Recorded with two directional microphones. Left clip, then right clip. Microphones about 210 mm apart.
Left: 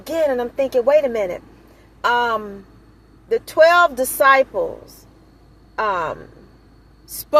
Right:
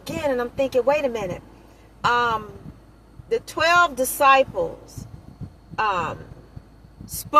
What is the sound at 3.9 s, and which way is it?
Speech, 15° left (ahead or behind).